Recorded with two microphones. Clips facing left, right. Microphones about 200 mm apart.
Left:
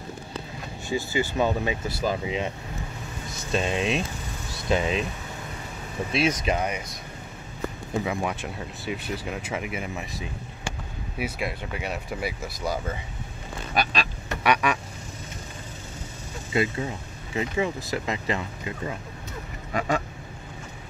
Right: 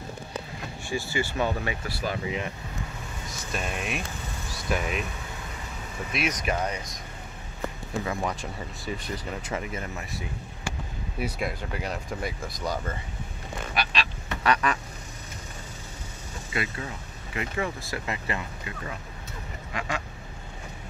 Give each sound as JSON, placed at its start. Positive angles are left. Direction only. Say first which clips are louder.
{"t": 0.8, "sound": "speech", "louder": "left 3 dB", "side_deg": 20}
{"t": 3.5, "sound": "speech", "louder": "left 7 dB", "side_deg": 25}
{"t": 6.1, "sound": "speech", "louder": "left 4 dB", "side_deg": 25}
{"t": 8.0, "sound": "speech", "louder": "left 1 dB", "side_deg": 15}
{"t": 8.4, "sound": "speech", "louder": "left 2 dB", "side_deg": 0}
{"t": 11.1, "sound": "speech", "louder": "even", "side_deg": 5}
{"t": 13.7, "sound": "vehicle", "louder": "left 4 dB", "side_deg": 45}
{"t": 14.4, "sound": "quack", "louder": "left 2 dB", "side_deg": 10}
{"t": 16.5, "sound": "speech", "louder": "left 7 dB", "side_deg": 25}